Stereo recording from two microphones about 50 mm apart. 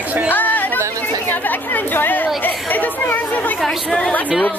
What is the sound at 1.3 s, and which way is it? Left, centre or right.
Chatter, left.